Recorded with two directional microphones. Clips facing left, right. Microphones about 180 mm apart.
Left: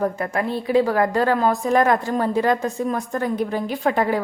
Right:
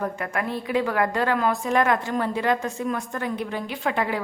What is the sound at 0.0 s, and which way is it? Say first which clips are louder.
A woman's voice: left 5 dB; 30° left (ahead or behind).